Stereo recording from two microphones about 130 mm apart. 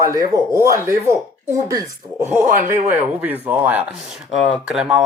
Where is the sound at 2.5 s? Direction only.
90° right.